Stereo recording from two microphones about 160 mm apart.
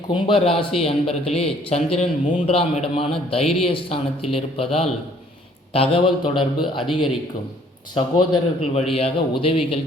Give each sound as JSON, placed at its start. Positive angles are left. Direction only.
{"t": 0.1, "sound": "speech", "side_deg": 35}
{"t": 2.5, "sound": "speech", "side_deg": 35}
{"t": 7.9, "sound": "speech", "side_deg": 30}